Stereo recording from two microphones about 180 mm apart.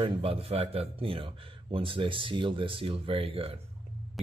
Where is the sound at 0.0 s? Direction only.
30° right (ahead or behind).